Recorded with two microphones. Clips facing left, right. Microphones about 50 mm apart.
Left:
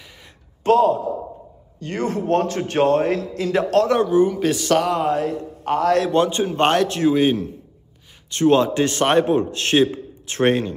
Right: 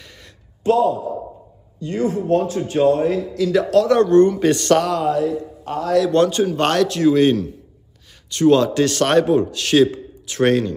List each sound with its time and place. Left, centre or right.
0.7 s speech: left
1.8 s speech: left
4.1 s speech: centre
4.8 s a man's voice: left
5.1 s a man's voice: left
6.1 s a man's voice: centre
7.2 s a man's voice: centre
8.3 s a man's voice: left